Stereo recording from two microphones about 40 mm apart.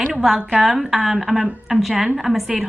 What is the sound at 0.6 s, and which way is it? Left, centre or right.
A woman's voice, centre.